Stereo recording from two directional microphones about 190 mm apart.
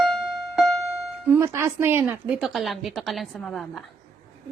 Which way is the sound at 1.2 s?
10° right (ahead or behind).